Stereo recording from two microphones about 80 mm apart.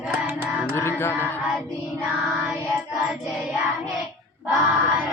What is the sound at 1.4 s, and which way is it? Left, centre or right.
Child singing, centre.